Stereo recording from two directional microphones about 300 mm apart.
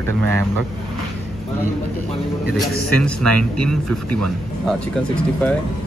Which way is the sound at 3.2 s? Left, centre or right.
Right.